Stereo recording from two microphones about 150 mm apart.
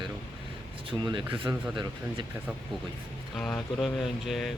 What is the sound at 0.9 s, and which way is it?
Speech, 35° right (ahead or behind).